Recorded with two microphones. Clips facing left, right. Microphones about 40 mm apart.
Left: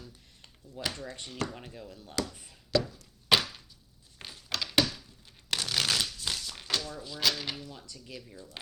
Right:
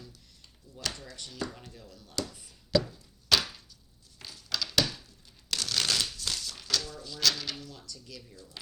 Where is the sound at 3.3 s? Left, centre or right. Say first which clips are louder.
Left 1 dB; left.